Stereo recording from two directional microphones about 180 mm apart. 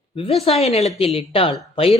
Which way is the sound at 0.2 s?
35° left (ahead or behind).